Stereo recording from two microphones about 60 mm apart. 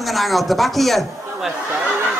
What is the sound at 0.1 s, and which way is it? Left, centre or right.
Speech, centre.